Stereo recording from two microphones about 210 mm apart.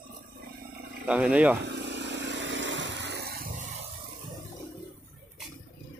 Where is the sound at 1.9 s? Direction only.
60° right (ahead or behind).